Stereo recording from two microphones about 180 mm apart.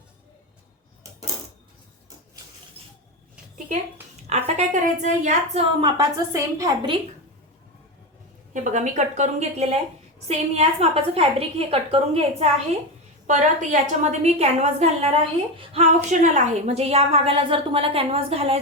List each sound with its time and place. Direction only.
4.3 s a woman's voice: 35° right (ahead or behind)
6.0 s a woman's voice: 20° right (ahead or behind)
8.6 s a woman's voice: 40° right (ahead or behind)